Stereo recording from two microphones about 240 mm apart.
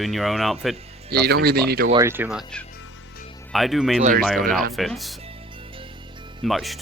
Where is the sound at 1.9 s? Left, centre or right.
Centre.